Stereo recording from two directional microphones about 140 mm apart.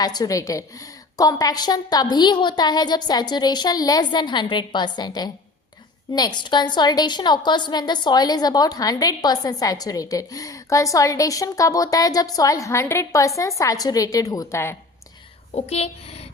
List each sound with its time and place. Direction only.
0.0 s a woman's voice: 25° left (ahead or behind)
15.5 s speech: 50° left (ahead or behind)